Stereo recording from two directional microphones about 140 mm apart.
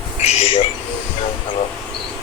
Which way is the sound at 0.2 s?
50° left (ahead or behind).